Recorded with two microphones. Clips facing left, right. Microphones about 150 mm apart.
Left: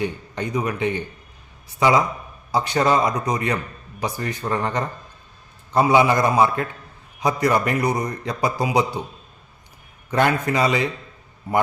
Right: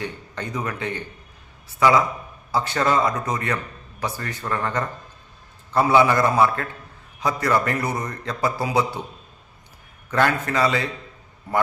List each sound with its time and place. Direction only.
0.0 s a man's voice: 15° left (ahead or behind)
10.1 s a man's voice: 15° left (ahead or behind)